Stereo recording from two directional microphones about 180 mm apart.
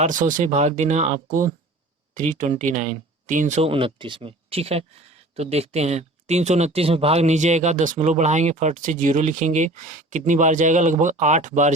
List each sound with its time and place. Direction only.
0.0 s speech: 45° right (ahead or behind)